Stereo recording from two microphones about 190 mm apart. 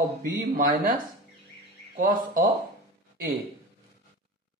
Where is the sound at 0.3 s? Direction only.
45° right (ahead or behind).